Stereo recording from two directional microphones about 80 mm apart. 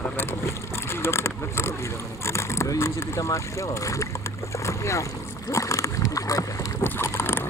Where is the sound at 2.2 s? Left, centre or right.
Left.